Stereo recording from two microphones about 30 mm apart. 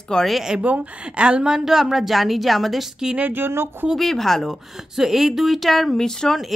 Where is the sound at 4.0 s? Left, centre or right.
Centre.